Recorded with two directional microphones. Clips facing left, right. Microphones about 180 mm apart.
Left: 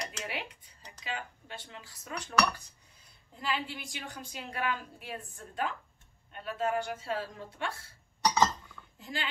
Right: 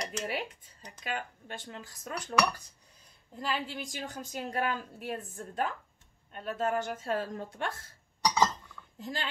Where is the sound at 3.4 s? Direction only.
40° right (ahead or behind).